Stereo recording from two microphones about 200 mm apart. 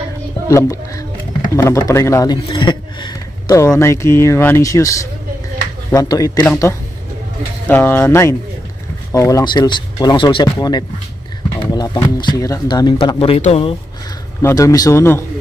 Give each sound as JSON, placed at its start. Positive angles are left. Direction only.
{"t": 0.5, "sound": "a man's voice", "side_deg": 15}
{"t": 14.4, "sound": "a man's voice", "side_deg": 15}